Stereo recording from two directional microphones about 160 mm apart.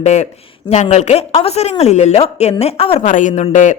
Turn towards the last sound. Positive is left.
turn(degrees=50)  # may be behind; listen again after turning